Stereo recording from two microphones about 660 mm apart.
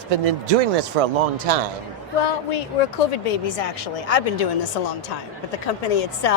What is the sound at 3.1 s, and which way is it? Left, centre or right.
Speech, left.